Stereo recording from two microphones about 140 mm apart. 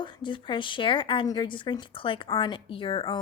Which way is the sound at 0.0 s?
35° left (ahead or behind).